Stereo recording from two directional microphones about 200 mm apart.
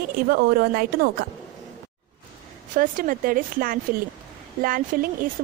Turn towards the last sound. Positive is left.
turn(degrees=-40)  # may be behind; listen again after turning